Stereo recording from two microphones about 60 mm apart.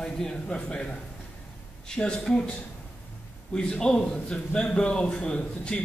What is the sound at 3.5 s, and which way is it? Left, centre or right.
A man's voice, centre.